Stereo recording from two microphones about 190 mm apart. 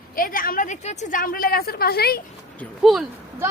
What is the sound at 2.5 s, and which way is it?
Speech, centre (ahead or behind).